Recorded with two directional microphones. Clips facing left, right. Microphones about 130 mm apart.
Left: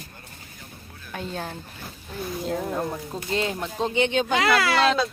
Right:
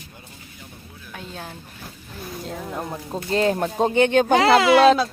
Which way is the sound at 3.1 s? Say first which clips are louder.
Right 9 dB; 40° right (ahead or behind).